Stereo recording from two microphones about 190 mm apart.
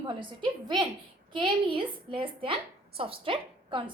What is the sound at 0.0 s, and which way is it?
A woman's voice, 25° right (ahead or behind).